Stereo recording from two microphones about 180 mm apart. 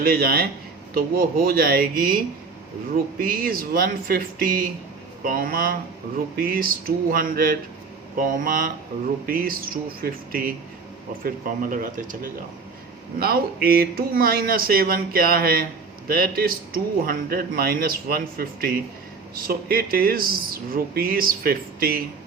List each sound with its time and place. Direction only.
0.0 s speech: 55° right (ahead or behind)